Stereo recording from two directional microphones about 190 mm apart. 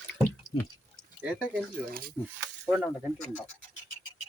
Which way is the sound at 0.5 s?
30° left (ahead or behind).